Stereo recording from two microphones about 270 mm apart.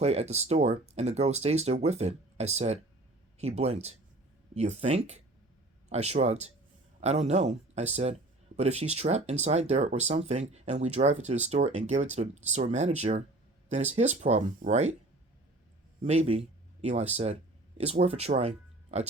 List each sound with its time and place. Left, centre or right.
0.0 s speech: right
16.0 s speech: right